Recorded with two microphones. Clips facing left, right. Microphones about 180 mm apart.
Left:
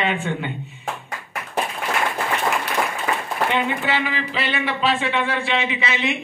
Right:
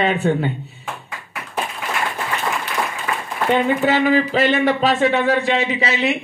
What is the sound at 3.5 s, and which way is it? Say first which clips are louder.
A man's voice: right 8 dB; 40° right (ahead or behind).